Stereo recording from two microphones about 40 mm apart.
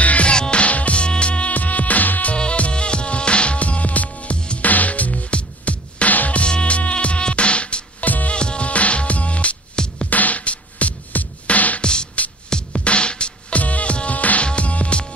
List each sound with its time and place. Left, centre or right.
0.0 s music: left
0.3 s music: left
1.5 s music: left
2.3 s music: left
6.4 s mosquito: left
8.0 s music: left
8.3 s music: left
11.8 s music: left
13.6 s music: left